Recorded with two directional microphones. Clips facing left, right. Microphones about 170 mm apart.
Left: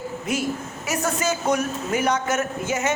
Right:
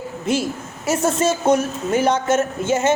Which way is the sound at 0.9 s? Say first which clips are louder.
Right 6 dB; 30° right (ahead or behind).